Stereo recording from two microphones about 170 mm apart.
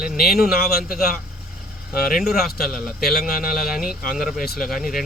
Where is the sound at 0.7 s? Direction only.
60° left (ahead or behind).